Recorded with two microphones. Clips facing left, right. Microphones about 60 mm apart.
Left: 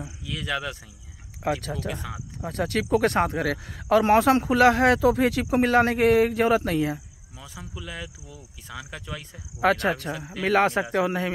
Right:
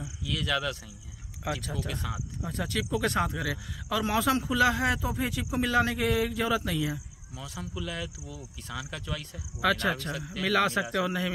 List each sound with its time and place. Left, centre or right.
0.2 s speech: centre
1.6 s speech: left
1.9 s speech: centre
2.4 s speech: left
7.3 s speech: centre
9.6 s a man's voice: left